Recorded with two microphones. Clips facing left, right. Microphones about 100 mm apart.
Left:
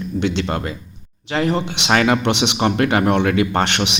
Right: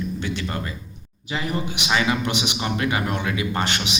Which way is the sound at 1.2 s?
70° left (ahead or behind).